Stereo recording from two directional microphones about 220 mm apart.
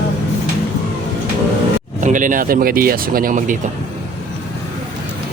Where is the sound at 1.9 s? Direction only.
35° right (ahead or behind).